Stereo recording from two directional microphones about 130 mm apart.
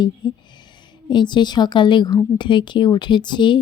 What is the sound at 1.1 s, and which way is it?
Speech, 35° left (ahead or behind).